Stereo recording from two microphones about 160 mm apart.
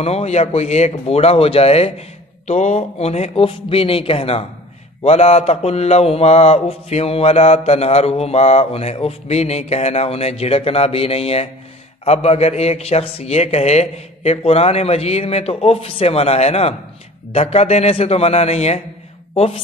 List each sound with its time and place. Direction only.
0.0 s mantra: 40° left (ahead or behind)
19.3 s a woman's voice: 40° left (ahead or behind)